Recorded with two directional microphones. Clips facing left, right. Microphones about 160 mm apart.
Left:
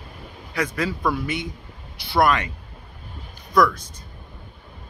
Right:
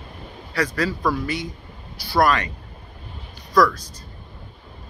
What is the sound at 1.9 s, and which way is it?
Speech, 20° left (ahead or behind).